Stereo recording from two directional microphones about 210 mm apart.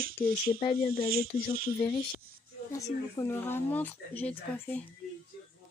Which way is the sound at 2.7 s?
15° left (ahead or behind).